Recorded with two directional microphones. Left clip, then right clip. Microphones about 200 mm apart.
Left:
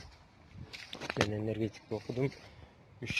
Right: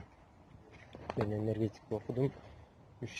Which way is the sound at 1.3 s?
Centre (ahead or behind).